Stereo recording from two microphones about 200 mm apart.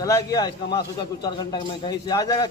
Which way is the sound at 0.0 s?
20° left (ahead or behind).